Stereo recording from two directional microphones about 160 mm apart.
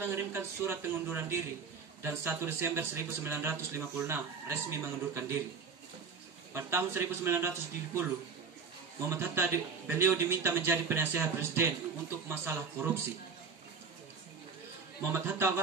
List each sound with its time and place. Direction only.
0.0 s a man's voice: 15° right (ahead or behind)
6.5 s a man's voice: 15° right (ahead or behind)
9.1 s a man's voice: 15° right (ahead or behind)
15.1 s a man's voice: 15° right (ahead or behind)